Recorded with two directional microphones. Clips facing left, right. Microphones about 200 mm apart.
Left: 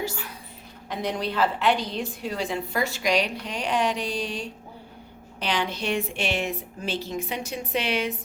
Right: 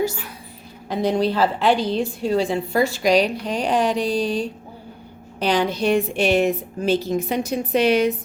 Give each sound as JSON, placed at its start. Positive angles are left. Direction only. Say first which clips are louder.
{"t": 0.9, "sound": "a woman's voice", "louder": "right 8 dB", "side_deg": -30}